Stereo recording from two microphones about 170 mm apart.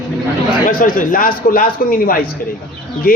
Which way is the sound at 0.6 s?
55° left (ahead or behind).